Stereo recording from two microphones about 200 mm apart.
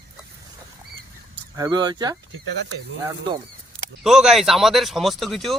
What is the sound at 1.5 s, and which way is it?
Speech, 20° right (ahead or behind).